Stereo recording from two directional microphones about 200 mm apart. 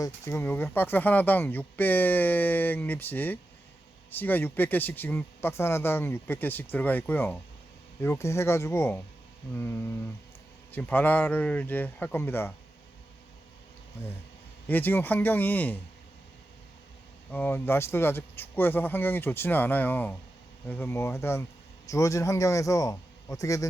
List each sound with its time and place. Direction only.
0.0 s speech: 10° left (ahead or behind)
14.7 s speech: 10° left (ahead or behind)
17.3 s speech: 10° left (ahead or behind)